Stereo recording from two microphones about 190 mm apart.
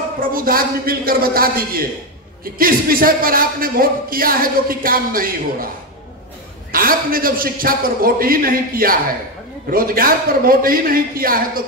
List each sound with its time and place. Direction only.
0.2 s speech: 50° right (ahead or behind)
6.7 s speech: 50° right (ahead or behind)